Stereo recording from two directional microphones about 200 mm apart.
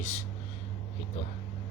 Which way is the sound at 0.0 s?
35° left (ahead or behind).